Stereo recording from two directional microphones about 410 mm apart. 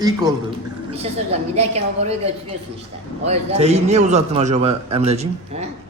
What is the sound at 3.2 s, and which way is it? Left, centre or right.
A man's voice, centre.